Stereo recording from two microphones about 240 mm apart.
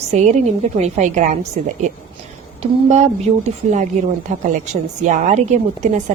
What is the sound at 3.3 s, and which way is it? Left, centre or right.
A woman's voice, right.